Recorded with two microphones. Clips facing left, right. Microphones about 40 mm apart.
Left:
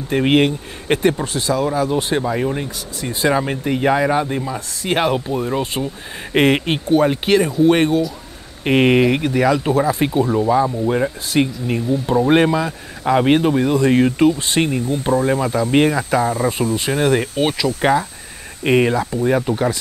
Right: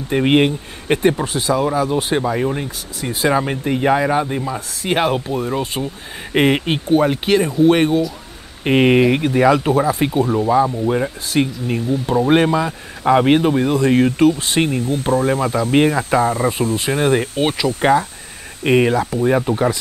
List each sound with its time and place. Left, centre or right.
0.1 s speech: centre
18.6 s speech: centre